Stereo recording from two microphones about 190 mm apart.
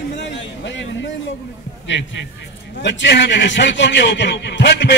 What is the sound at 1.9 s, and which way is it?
A man's voice, 75° left (ahead or behind).